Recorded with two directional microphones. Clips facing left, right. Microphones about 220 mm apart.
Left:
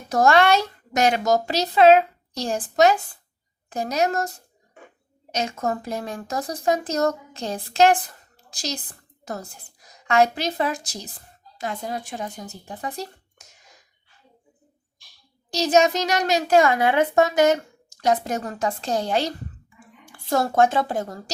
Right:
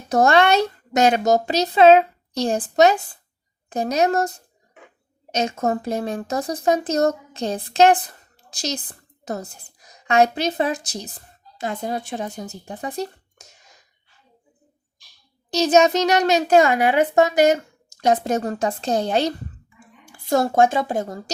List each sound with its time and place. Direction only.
0.1 s a child's voice: 25° right (ahead or behind)
5.3 s a child's voice: 25° right (ahead or behind)
10.1 s a child's voice: 20° right (ahead or behind)
15.5 s a child's voice: 25° right (ahead or behind)
18.0 s a child's voice: 25° right (ahead or behind)
20.3 s speech: 15° right (ahead or behind)